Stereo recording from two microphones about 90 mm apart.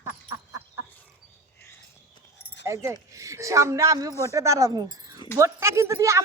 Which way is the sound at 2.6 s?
35° right (ahead or behind).